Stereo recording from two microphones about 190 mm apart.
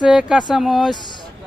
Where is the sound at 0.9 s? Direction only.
25° left (ahead or behind).